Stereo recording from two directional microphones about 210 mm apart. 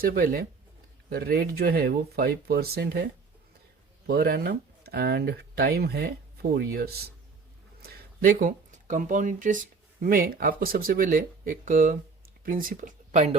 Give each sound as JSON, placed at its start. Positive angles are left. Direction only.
{"t": 0.0, "sound": "speech", "side_deg": -45}